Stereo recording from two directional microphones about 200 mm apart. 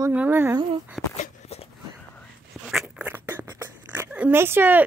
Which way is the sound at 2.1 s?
Centre (ahead or behind).